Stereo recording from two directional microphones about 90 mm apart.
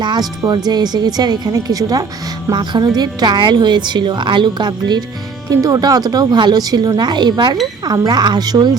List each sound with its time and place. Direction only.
0.0 s a woman's voice: 55° right (ahead or behind)
5.5 s speech: 45° right (ahead or behind)